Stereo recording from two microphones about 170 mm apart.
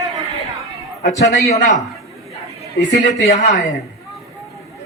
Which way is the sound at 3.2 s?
45° left (ahead or behind).